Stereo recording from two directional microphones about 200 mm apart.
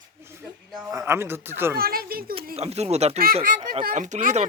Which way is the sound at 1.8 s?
50° right (ahead or behind).